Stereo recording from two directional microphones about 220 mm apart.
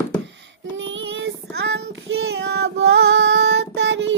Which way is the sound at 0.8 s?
55° right (ahead or behind).